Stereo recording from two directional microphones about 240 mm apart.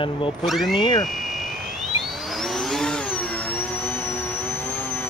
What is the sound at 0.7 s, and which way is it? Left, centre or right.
Speech, centre.